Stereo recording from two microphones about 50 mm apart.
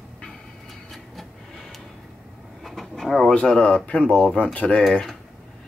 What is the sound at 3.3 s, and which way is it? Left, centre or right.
Speech, left.